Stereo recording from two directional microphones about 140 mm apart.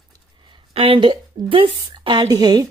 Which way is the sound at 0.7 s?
40° right (ahead or behind).